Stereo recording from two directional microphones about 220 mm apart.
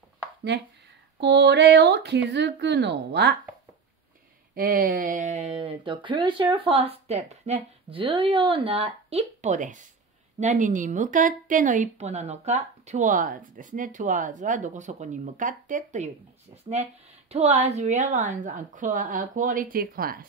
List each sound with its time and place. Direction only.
1.2 s speech: 50° right (ahead or behind)
4.6 s speech: 40° right (ahead or behind)